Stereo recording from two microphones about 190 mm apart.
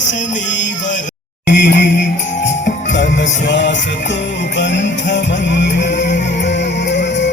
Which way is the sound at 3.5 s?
65° left (ahead or behind).